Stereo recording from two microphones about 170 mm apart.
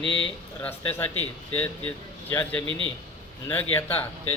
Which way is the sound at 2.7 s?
30° right (ahead or behind).